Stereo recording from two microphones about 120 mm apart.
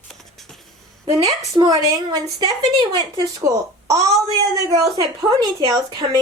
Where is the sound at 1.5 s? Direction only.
35° right (ahead or behind).